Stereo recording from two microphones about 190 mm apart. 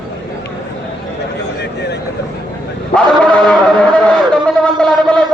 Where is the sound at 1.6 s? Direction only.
65° left (ahead or behind).